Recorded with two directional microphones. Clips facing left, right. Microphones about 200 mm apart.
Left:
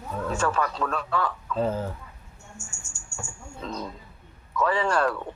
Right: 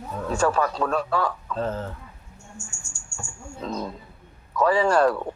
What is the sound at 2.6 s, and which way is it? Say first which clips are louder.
Speech: right 3 dB; 20° left (ahead or behind).